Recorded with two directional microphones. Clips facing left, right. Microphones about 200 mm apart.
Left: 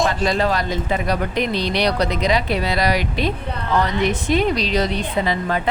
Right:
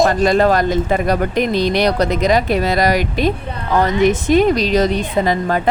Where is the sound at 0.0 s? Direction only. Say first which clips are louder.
Right 6 dB; 50° right (ahead or behind).